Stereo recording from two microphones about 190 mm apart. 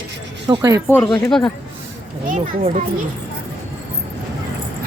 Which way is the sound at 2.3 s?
40° right (ahead or behind).